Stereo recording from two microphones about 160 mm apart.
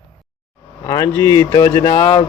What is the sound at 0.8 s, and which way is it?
Speech, 20° left (ahead or behind).